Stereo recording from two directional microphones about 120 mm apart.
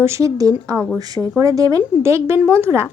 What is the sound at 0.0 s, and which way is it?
A woman's voice, 25° right (ahead or behind).